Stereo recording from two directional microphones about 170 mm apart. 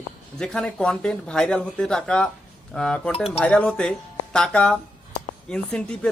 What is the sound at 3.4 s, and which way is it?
Speech, 5° left (ahead or behind).